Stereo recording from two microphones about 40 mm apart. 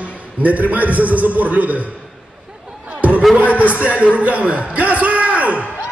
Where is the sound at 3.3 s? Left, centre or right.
Right.